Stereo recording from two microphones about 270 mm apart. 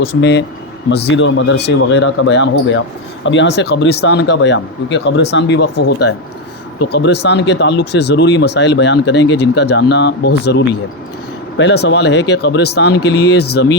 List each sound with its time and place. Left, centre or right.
0.2 s speech: left
6.7 s speech: left